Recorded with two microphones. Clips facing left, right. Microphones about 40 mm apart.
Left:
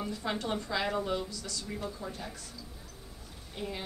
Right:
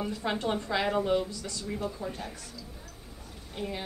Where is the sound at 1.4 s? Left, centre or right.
Right.